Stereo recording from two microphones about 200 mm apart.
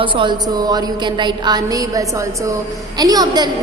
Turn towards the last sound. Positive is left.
turn(degrees=-20)  # may be behind; listen again after turning